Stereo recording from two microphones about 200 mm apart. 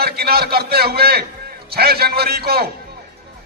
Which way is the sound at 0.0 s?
50° right (ahead or behind).